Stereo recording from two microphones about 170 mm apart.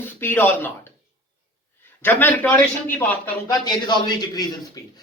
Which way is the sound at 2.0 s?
10° left (ahead or behind).